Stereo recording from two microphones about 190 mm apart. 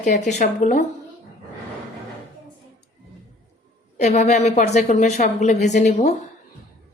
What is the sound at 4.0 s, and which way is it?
A woman's voice, 35° left (ahead or behind).